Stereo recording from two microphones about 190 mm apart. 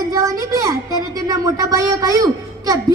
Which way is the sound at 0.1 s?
20° right (ahead or behind).